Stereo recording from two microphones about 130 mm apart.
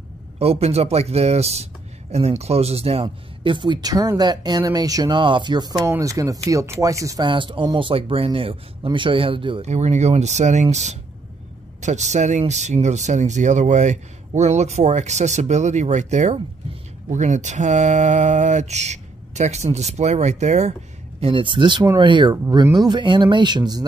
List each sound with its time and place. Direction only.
0.4 s speech: 55° right (ahead or behind); by 7.2 s 25° right (ahead or behind)
7.2 s speech: 40° right (ahead or behind)
9.6 s speech: 55° right (ahead or behind)
21.2 s speech: 40° right (ahead or behind)